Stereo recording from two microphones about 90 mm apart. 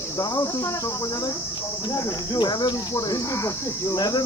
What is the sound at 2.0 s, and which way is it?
Speech, 40° left (ahead or behind).